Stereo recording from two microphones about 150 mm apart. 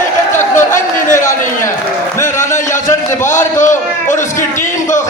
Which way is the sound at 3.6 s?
55° left (ahead or behind).